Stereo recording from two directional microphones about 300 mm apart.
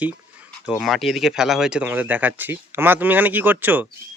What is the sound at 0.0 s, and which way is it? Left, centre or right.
Speech, centre.